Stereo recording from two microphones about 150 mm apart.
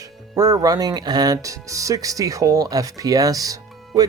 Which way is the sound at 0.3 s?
25° right (ahead or behind).